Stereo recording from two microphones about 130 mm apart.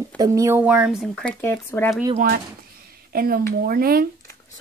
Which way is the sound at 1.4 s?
15° left (ahead or behind).